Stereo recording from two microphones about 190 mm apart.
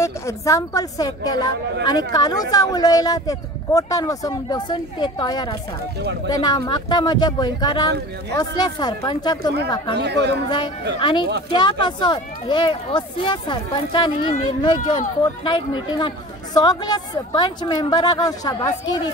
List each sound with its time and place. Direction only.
0.0 s speech: 15° left (ahead or behind)
9.9 s speech: 60° right (ahead or behind)
11.0 s speech: 25° left (ahead or behind)